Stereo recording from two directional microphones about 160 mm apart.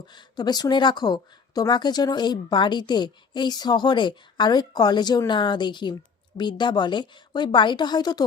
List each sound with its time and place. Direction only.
0.1 s speech: 25° left (ahead or behind)